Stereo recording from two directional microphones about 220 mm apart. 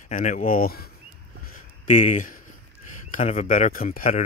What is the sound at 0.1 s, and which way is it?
Speech, 35° left (ahead or behind).